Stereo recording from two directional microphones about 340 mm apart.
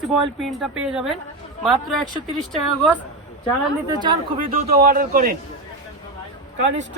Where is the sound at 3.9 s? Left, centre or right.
Centre.